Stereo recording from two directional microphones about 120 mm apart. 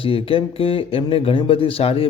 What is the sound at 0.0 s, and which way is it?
A man's voice, 50° left (ahead or behind).